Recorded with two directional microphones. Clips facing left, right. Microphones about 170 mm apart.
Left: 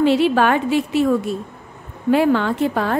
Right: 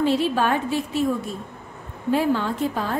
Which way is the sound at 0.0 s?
75° left (ahead or behind).